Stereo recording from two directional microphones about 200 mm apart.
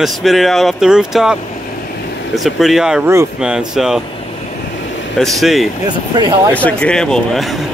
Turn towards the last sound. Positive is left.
turn(degrees=0)  # may be behind; listen again after turning